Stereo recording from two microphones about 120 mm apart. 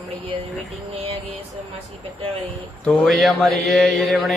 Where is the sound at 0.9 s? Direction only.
55° right (ahead or behind).